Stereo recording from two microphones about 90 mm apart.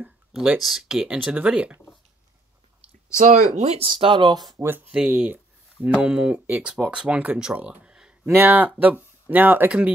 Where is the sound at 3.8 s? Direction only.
75° right (ahead or behind); by 4.5 s 55° right (ahead or behind).